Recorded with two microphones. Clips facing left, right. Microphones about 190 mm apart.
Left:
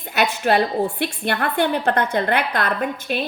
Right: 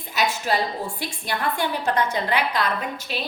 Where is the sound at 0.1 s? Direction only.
60° left (ahead or behind).